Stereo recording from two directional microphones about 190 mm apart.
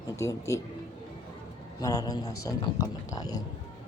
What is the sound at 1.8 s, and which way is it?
A man's voice, 20° left (ahead or behind).